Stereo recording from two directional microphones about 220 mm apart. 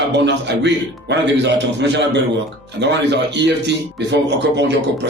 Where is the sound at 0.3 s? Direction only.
50° right (ahead or behind).